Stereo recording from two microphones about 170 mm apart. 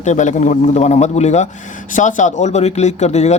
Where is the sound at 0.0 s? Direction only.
45° left (ahead or behind).